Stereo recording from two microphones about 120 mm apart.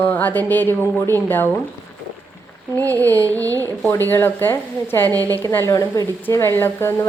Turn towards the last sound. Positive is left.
turn(degrees=20)  # may be behind; listen again after turning